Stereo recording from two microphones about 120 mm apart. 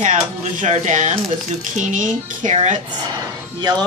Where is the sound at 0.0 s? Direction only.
90° right.